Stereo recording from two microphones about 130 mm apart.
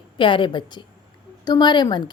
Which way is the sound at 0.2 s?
40° left (ahead or behind).